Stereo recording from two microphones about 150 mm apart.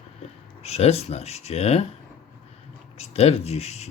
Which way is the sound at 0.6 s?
45° left (ahead or behind).